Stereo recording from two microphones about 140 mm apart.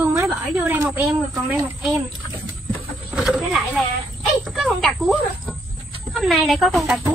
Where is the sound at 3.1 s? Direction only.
Centre (ahead or behind).